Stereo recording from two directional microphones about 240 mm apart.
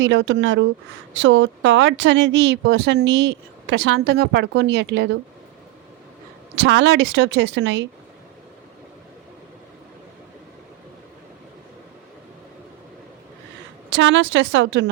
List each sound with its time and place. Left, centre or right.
0.0 s speech: right
6.6 s speech: right
13.9 s speech: right